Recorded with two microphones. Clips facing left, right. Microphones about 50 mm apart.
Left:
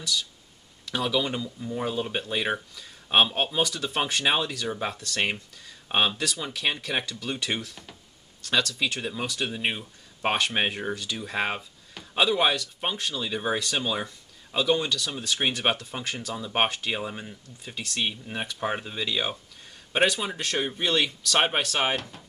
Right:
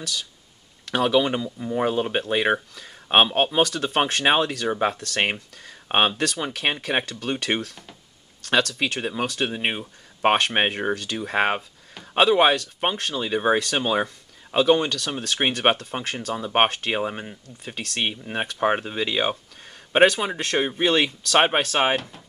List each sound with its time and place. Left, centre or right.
0.9 s speech: right
8.7 s speech: right
21.9 s speech: centre